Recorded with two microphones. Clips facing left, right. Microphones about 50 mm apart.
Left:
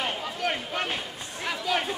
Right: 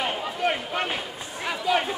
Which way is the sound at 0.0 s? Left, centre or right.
Centre.